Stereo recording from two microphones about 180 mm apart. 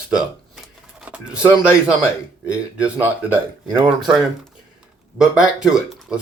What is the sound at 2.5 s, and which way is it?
Speech, 5° right (ahead or behind).